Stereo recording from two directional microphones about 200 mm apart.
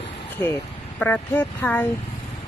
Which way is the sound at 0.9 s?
10° left (ahead or behind).